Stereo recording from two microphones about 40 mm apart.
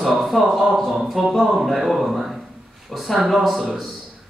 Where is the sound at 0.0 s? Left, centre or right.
Centre.